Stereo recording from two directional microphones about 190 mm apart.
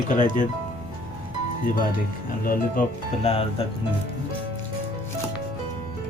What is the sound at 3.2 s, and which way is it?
Speech, 30° left (ahead or behind).